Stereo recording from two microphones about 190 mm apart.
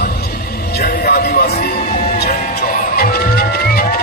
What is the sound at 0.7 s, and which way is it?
Music, 55° left (ahead or behind).